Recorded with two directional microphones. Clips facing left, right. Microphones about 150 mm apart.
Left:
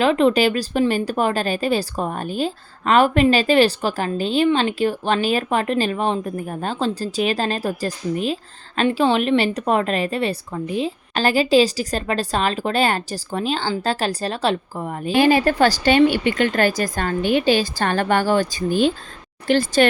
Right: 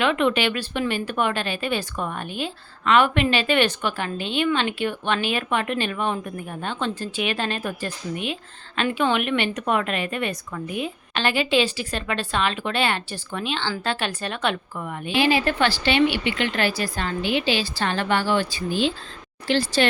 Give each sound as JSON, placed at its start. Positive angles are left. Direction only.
{"t": 0.0, "sound": "speech", "side_deg": 35}